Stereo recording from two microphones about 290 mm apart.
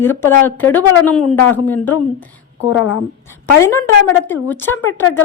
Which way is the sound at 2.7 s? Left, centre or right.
Left.